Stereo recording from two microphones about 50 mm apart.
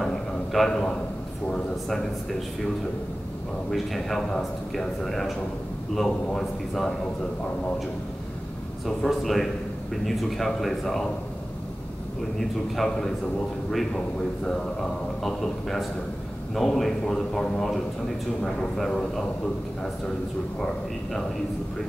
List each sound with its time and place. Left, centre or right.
0.0 s a sound: centre
3.7 s speech: centre
8.8 s speech: centre
12.4 s speech: centre
13.9 s a man's voice: centre